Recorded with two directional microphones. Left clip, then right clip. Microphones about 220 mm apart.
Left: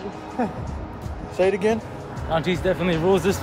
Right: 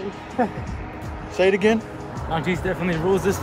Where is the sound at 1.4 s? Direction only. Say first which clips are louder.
Right 2 dB; 35° right (ahead or behind).